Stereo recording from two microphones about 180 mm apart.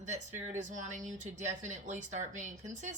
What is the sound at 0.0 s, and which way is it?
Speech, 40° right (ahead or behind).